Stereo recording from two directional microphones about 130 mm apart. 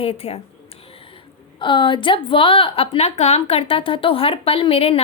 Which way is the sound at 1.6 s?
40° left (ahead or behind).